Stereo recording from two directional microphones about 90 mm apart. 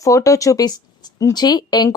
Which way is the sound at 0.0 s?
40° left (ahead or behind).